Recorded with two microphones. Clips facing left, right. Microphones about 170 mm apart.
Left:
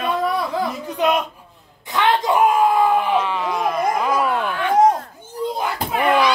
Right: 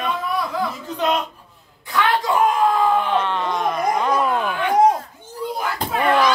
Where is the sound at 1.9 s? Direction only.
20° left (ahead or behind).